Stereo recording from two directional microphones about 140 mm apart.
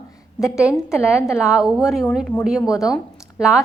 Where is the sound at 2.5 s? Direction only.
25° left (ahead or behind).